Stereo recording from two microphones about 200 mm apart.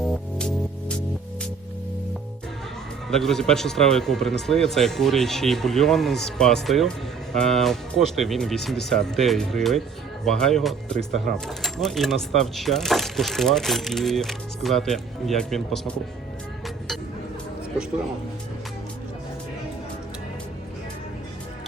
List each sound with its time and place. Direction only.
0.0 s music: centre (ahead or behind)
3.1 s speech: centre (ahead or behind)
16.6 s music: centre (ahead or behind)